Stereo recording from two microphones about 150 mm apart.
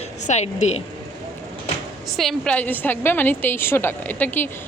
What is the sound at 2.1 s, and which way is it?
A woman's voice, centre (ahead or behind).